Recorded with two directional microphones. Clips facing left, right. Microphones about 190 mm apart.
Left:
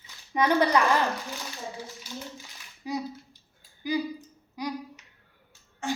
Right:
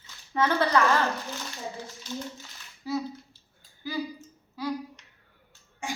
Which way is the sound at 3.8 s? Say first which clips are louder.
Left 4 dB; 15° left (ahead or behind).